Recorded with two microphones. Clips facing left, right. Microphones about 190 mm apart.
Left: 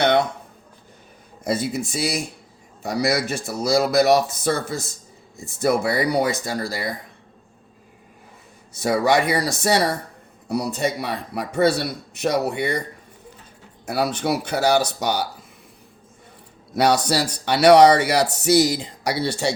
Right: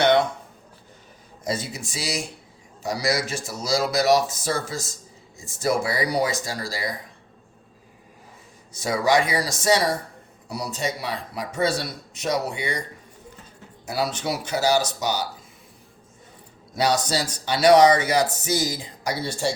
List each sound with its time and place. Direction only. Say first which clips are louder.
1.5 s a man's voice: left 6 dB; 55° left (ahead or behind)
8.7 s a man's voice: left 2 dB; 60° left (ahead or behind)
13.8 s a man's voice: left 4 dB; 55° left (ahead or behind)
16.7 s speech: left 4 dB; 60° left (ahead or behind)